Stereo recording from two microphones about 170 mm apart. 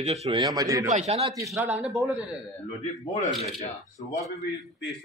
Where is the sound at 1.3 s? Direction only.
15° right (ahead or behind).